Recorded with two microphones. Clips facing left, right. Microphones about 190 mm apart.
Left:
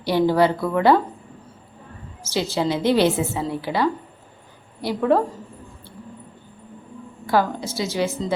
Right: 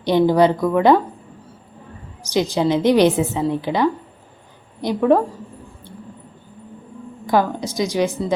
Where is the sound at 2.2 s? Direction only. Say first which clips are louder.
Right 4 dB; 15° right (ahead or behind).